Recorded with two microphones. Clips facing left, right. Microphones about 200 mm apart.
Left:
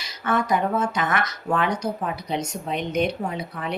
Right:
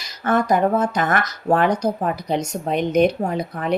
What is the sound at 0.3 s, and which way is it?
Speech, 40° right (ahead or behind).